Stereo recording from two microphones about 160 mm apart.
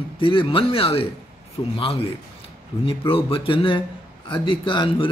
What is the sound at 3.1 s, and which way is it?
Mantra, 35° left (ahead or behind).